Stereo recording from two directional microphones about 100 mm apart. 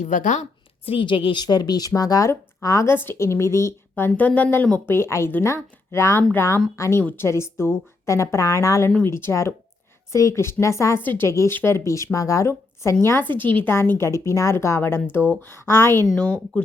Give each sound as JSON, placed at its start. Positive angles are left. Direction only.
{"t": 0.9, "sound": "a woman's voice", "side_deg": 60}
{"t": 7.0, "sound": "a woman's voice", "side_deg": 15}
{"t": 7.3, "sound": "a woman's voice", "side_deg": 25}
{"t": 13.4, "sound": "a woman's voice", "side_deg": -60}
{"t": 13.7, "sound": "a woman's voice", "side_deg": 20}